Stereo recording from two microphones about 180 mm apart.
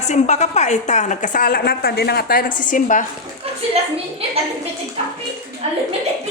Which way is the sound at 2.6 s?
45° left (ahead or behind).